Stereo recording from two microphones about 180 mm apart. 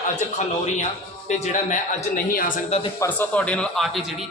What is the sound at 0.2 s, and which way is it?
A man's voice, 40° left (ahead or behind).